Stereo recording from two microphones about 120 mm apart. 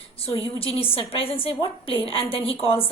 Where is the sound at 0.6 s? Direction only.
50° left (ahead or behind).